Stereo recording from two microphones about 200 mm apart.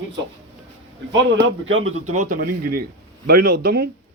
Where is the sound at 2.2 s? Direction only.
45° right (ahead or behind).